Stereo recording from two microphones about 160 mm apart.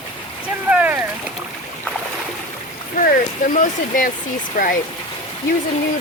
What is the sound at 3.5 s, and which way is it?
Speech, 60° left (ahead or behind).